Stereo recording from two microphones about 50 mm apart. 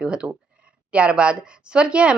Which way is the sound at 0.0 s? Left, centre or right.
Centre.